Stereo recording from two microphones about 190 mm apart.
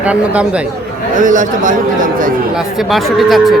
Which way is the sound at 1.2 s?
45° right (ahead or behind).